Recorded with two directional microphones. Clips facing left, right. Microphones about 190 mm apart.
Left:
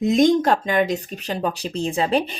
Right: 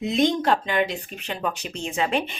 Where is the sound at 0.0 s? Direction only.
45° left (ahead or behind).